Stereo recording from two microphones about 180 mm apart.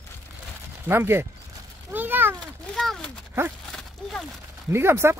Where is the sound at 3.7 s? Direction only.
Centre (ahead or behind).